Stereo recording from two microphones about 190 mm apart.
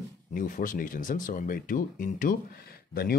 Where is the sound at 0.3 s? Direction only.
45° left (ahead or behind).